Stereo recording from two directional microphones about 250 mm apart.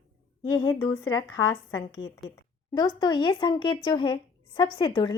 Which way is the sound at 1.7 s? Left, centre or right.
Left.